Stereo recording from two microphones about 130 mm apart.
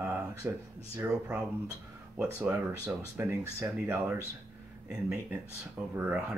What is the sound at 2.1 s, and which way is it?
Speech, 15° right (ahead or behind).